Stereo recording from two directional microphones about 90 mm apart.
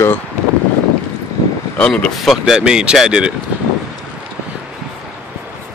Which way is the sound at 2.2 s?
Centre (ahead or behind).